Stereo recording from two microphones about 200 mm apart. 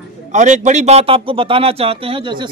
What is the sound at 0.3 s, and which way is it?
Speech, 35° right (ahead or behind).